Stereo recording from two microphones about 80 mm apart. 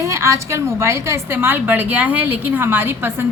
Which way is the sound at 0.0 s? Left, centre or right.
Right.